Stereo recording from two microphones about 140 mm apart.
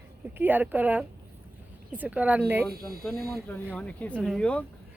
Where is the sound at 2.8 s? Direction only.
90° right.